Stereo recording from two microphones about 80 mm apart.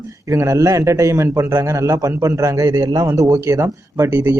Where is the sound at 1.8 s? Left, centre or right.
Right.